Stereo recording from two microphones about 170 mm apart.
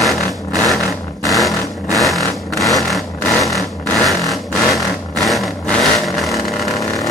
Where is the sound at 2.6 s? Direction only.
Centre (ahead or behind).